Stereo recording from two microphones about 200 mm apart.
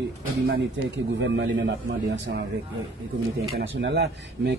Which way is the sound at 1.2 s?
65° right (ahead or behind).